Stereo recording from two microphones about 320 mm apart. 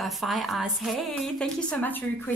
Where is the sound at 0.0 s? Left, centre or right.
Centre.